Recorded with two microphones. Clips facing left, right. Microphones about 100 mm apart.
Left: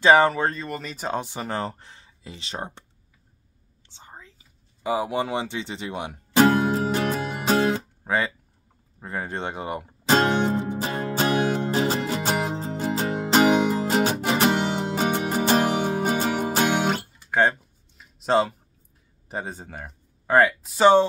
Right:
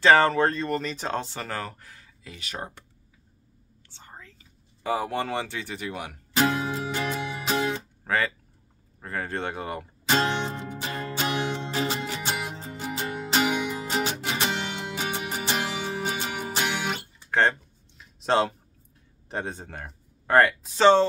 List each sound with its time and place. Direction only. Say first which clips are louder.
0.0 s speech: left 1 dB; 15° left (ahead or behind)
3.9 s whispering: left 1 dB; 20° left (ahead or behind)
6.3 s music: left 6 dB; 45° left (ahead or behind)
8.0 s guitar: even; 20° left (ahead or behind)
9.0 s speech: left 1 dB; 20° left (ahead or behind)
10.0 s music: left 5 dB; 40° left (ahead or behind)
17.3 s a sound: left 2 dB; 10° left (ahead or behind)
19.2 s speech: even; 5° left (ahead or behind)